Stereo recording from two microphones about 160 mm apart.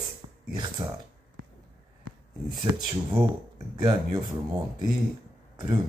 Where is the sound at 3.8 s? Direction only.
25° right (ahead or behind).